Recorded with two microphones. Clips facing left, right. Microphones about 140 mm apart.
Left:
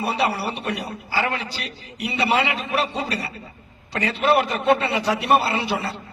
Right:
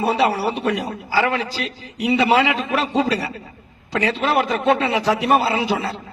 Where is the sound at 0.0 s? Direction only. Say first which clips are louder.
Right 5 dB; 90° right.